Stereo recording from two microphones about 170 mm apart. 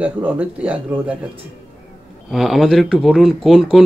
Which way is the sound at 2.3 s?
Centre (ahead or behind).